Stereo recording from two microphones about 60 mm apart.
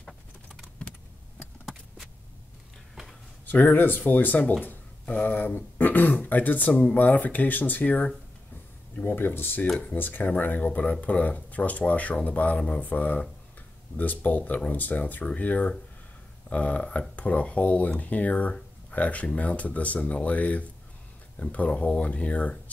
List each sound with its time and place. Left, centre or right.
0.8 s typing: centre
1.4 s a sound: centre
3.4 s speech: left
4.6 s throat clearing: left
6.2 s speech: left